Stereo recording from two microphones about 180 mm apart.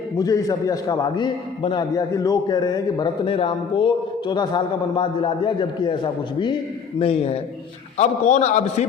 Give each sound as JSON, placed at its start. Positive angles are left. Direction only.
{"t": 0.2, "sound": "a man's voice", "side_deg": 20}